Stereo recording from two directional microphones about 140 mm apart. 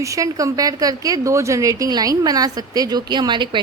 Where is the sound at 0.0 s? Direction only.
25° right (ahead or behind).